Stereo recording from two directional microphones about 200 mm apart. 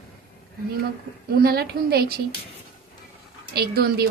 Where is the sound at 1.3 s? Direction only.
50° right (ahead or behind).